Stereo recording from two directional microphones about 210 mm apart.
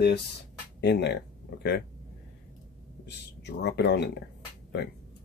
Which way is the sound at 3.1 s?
55° left (ahead or behind).